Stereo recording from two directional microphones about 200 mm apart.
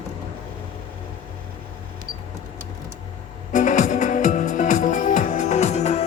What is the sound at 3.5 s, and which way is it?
Music, 40° left (ahead or behind).